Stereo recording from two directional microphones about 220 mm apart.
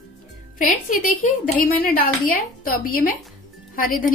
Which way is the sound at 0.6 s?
35° left (ahead or behind).